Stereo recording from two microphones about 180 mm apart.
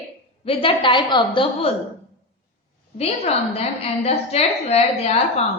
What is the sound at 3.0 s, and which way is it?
A woman's voice, 35° left (ahead or behind).